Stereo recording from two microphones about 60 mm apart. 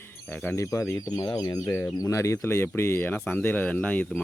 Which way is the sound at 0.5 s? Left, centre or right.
Left.